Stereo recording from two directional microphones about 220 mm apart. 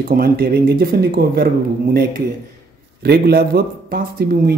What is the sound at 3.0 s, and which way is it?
Speech, 45° right (ahead or behind).